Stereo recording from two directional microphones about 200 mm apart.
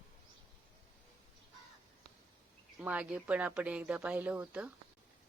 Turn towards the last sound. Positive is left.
turn(degrees=-5)  # may be behind; listen again after turning